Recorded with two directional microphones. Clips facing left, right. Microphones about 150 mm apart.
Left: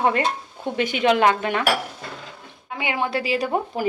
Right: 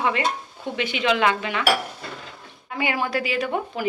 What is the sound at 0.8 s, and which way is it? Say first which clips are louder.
Speech: left 3 dB; 45° left (ahead or behind).